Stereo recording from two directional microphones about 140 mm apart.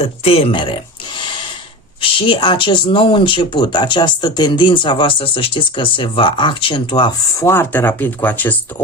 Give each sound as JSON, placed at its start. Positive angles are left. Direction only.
{"t": 0.0, "sound": "speech", "side_deg": 45}
{"t": 1.2, "sound": "a sound", "side_deg": 35}
{"t": 2.0, "sound": "speech", "side_deg": 35}
{"t": 7.3, "sound": "speech", "side_deg": 20}